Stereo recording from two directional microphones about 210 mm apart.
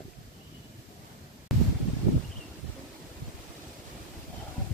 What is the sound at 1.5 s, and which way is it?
Wind noise, centre (ahead or behind).